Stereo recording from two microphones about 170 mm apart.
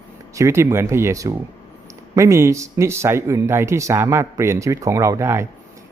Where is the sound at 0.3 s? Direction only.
15° right (ahead or behind).